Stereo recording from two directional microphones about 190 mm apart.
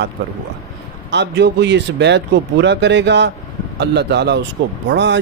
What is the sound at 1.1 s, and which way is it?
Speech, 65° right (ahead or behind).